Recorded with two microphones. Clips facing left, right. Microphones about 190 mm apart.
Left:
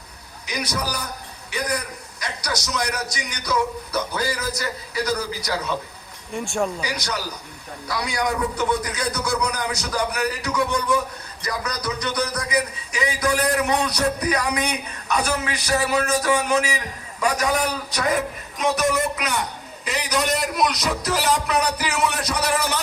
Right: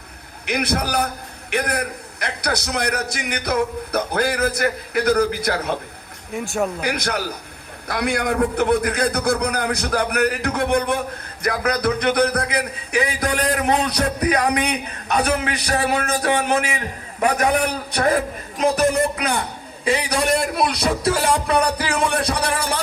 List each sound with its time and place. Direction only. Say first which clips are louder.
0.4 s a man's voice: right 5 dB; 60° right (ahead or behind)
6.3 s speech: right 2 dB; 5° right (ahead or behind)
6.8 s a man's voice: right 5 dB; 60° right (ahead or behind)
17.2 s a man's voice: right 3 dB; 55° right (ahead or behind)
18.6 s speech: right 4 dB; 30° right (ahead or behind)